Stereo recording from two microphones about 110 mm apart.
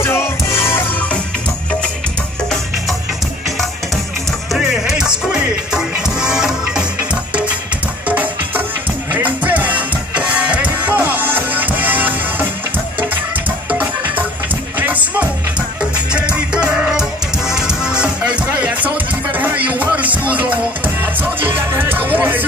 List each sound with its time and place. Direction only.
0.0 s music: 20° left (ahead or behind)
4.5 s music: 5° right (ahead or behind)
8.1 s music: 15° right (ahead or behind)
13.7 s music: 15° right (ahead or behind)